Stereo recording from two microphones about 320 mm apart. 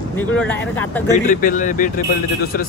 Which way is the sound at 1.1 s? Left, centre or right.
Left.